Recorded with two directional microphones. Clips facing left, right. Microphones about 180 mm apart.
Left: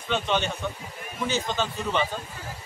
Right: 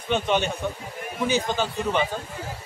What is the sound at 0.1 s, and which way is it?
A man's voice, 15° right (ahead or behind).